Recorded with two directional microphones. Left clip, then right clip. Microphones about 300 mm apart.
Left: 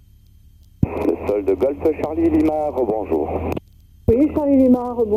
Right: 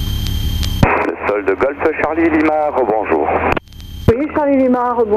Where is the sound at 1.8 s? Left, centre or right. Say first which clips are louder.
Right 4 dB; centre.